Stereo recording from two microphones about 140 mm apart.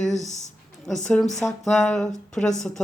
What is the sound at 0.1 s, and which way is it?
Speech, 55° left (ahead or behind).